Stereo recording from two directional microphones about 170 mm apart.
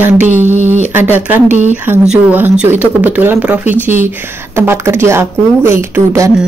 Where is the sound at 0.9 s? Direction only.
10° right (ahead or behind).